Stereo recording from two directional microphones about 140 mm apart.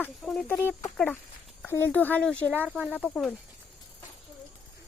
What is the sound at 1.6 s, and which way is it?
Speech, 15° left (ahead or behind).